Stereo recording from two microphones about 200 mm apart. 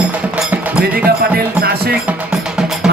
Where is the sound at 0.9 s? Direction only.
50° right (ahead or behind).